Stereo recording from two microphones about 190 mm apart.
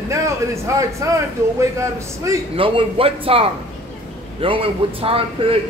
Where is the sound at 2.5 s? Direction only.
30° right (ahead or behind).